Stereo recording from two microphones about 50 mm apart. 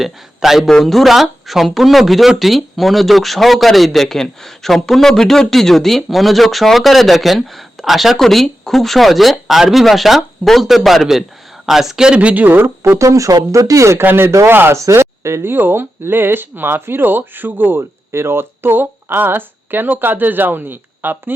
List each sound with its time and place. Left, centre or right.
0.0 s speech: centre
0.7 s speech: centre
12.2 s speech: right
12.8 s speech: right
14.0 s speech: right
14.8 s speech: right